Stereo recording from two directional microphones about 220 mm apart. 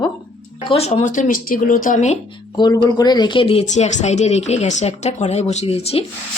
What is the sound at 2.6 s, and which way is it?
Speech, 20° left (ahead or behind).